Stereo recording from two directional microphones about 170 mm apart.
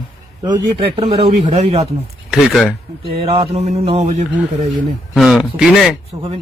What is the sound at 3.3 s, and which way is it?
Speech, 40° right (ahead or behind).